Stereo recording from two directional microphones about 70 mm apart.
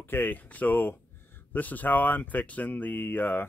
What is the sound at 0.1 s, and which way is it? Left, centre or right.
Speech, left.